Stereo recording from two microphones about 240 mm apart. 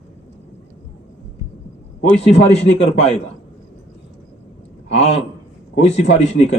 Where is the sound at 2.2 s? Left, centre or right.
Left.